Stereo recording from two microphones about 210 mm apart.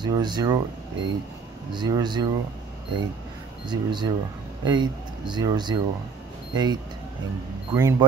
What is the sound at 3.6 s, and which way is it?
Speech, 20° right (ahead or behind).